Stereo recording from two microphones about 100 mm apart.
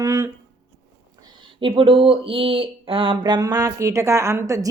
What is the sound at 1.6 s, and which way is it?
Speech, 60° right (ahead or behind).